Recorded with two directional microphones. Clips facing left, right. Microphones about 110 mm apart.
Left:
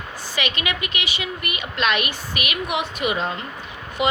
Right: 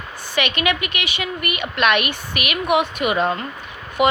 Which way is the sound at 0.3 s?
60° right (ahead or behind).